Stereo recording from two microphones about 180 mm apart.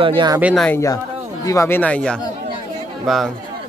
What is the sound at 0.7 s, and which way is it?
A man's voice, 15° left (ahead or behind).